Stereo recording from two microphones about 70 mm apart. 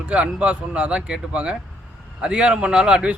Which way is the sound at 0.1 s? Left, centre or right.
Centre.